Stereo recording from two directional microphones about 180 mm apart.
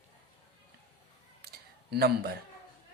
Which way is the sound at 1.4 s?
60° right (ahead or behind).